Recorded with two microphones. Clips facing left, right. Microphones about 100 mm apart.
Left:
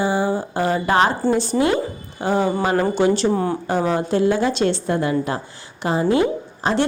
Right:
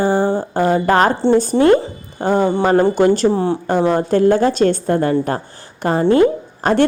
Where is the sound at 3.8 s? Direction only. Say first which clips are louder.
Right 5 dB; 45° right (ahead or behind).